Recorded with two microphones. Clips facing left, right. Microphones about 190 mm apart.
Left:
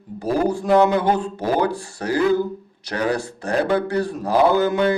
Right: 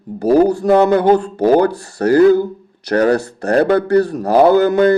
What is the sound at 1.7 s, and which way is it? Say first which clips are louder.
Speech: right 10 dB; 65° right (ahead or behind).